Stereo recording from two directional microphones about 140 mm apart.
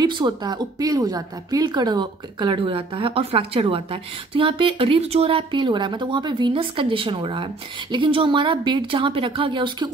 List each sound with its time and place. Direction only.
0.0 s a woman's voice: 30° right (ahead or behind)